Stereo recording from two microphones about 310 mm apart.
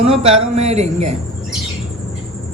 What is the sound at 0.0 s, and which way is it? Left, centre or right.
Speech, centre.